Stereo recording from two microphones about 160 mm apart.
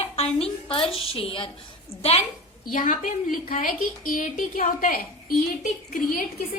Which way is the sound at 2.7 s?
55° left (ahead or behind).